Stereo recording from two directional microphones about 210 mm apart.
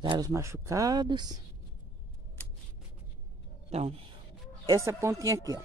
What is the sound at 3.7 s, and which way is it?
Speech, 30° right (ahead or behind).